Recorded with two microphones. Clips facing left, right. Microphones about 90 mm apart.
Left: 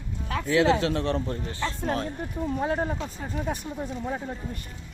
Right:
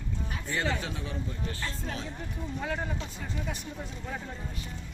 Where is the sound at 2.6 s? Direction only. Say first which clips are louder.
Left 5 dB; 35° left (ahead or behind).